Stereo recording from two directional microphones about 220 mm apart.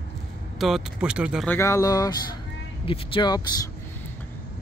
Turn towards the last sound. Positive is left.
turn(degrees=20)  # may be behind; listen again after turning